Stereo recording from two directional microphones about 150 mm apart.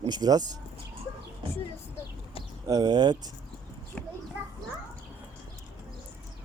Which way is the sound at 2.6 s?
25° right (ahead or behind).